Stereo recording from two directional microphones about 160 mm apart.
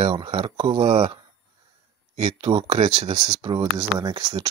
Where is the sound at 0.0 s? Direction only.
30° right (ahead or behind).